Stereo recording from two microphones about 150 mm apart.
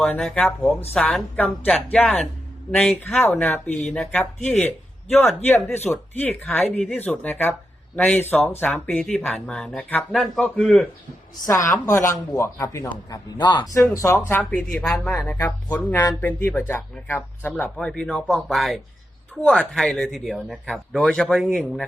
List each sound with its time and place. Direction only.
0.0 s speech: 5° left (ahead or behind)
3.2 s speech: 15° left (ahead or behind)
5.9 s speech: 10° left (ahead or behind)
11.3 s a woman's voice: 20° left (ahead or behind)
13.3 s a woman's voice: 30° left (ahead or behind)
13.8 s speech: 20° left (ahead or behind)
14.8 s speech: 5° left (ahead or behind)